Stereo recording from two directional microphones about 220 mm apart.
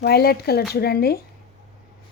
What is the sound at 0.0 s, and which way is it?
A woman's voice, 45° left (ahead or behind).